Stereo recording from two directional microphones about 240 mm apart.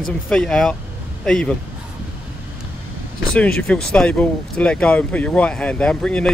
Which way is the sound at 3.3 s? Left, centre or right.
Centre.